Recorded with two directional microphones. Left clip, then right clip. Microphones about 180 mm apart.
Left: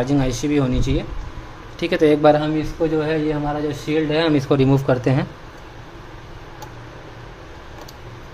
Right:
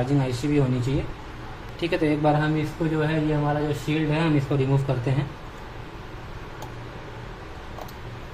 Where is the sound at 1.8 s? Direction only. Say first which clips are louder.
Left 7 dB; 45° left (ahead or behind).